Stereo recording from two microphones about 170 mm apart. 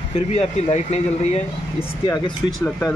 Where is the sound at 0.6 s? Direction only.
40° left (ahead or behind).